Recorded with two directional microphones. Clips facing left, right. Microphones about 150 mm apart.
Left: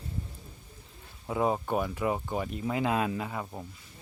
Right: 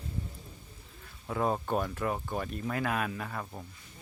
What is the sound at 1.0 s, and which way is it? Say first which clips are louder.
Speech: left 2 dB; 15° left (ahead or behind).